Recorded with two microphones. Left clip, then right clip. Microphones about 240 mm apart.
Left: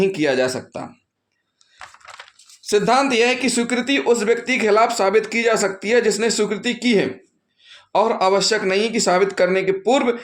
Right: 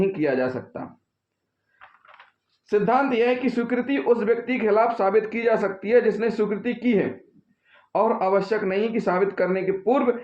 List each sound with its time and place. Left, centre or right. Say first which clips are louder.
0.0 s speech: left 4 dB; left
2.6 s speech: left 4 dB; left